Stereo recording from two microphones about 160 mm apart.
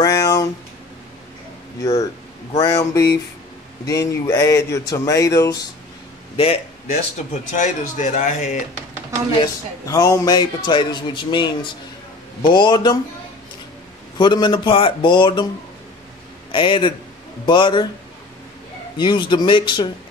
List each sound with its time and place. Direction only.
0.0 s a sound: 20° left (ahead or behind)
2.5 s a man's voice: 25° left (ahead or behind)
6.3 s a man's voice: 35° left (ahead or behind)
7.2 s speech: 50° left (ahead or behind)
9.8 s a man's voice: 20° left (ahead or behind)
14.1 s a man's voice: 30° left (ahead or behind)
16.5 s a man's voice: 30° left (ahead or behind)
18.9 s a man's voice: 30° left (ahead or behind)